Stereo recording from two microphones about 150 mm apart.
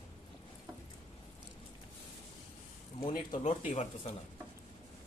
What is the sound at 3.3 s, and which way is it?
Speech, 50° left (ahead or behind).